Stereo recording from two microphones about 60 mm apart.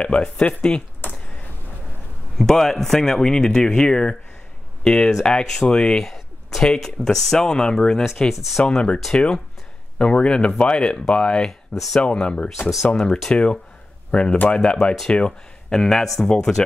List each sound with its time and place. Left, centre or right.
0.0 s speech: centre
2.3 s speech: centre
6.0 s a sound: centre
6.7 s speech: centre
8.0 s speech: centre
8.6 s speech: centre